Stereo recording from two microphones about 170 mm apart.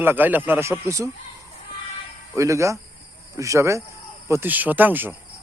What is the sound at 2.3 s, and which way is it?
Speech, 15° right (ahead or behind).